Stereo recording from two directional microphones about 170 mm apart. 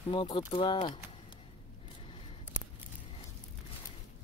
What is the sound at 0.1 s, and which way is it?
Speech, 30° left (ahead or behind).